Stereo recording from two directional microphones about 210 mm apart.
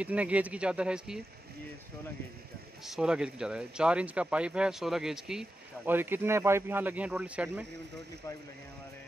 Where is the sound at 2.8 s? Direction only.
Centre (ahead or behind).